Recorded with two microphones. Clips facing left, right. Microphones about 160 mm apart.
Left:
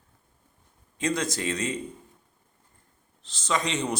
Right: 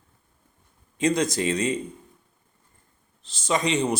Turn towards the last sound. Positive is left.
turn(degrees=-10)  # may be behind; listen again after turning